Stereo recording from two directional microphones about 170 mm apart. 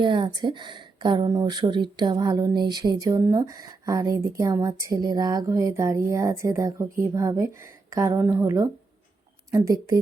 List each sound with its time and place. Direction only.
0.0 s speech: 30° right (ahead or behind)